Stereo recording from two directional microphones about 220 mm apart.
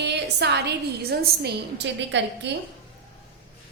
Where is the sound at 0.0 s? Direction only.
50° right (ahead or behind).